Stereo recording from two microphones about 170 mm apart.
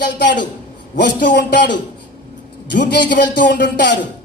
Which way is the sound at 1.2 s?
90° left.